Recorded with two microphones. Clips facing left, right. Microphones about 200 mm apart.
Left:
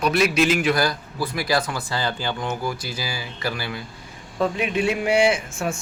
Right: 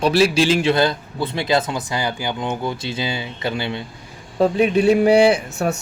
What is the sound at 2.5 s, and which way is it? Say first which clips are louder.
A man's voice: right 3 dB; 25° right (ahead or behind).